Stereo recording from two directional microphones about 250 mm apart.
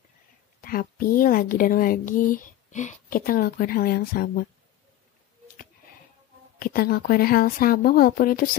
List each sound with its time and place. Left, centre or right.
0.6 s speech: left
6.6 s speech: left